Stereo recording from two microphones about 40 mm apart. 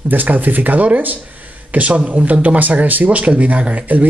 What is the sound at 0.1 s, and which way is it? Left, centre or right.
A man's voice, right.